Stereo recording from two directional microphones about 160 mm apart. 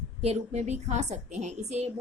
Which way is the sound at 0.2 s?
45° right (ahead or behind).